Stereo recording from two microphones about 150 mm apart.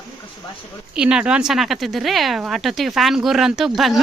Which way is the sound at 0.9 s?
5° right (ahead or behind).